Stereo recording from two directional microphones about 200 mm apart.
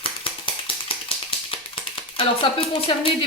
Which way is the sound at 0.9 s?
30° left (ahead or behind).